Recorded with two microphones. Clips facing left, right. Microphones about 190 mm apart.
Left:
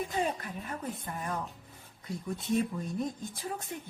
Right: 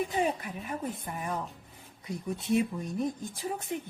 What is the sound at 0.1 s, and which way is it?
A woman's voice, 15° right (ahead or behind).